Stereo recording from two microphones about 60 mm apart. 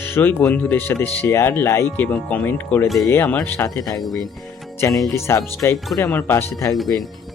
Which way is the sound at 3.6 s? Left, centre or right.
Left.